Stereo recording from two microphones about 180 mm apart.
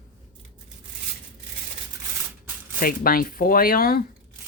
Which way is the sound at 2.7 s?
55° left (ahead or behind).